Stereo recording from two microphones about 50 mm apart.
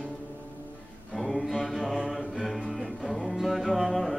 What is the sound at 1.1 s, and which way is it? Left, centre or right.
Mantra, centre.